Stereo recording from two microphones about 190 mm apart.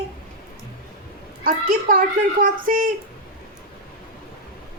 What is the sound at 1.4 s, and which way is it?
A woman's voice, 50° right (ahead or behind).